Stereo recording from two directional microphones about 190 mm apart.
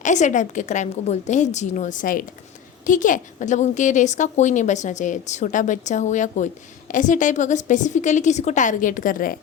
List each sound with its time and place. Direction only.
0.0 s a woman's voice: 40° left (ahead or behind)